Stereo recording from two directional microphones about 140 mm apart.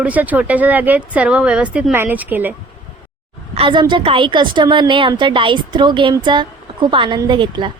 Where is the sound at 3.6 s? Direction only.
35° right (ahead or behind).